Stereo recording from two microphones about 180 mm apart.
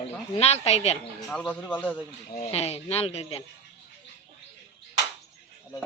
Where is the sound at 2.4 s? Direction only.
35° left (ahead or behind).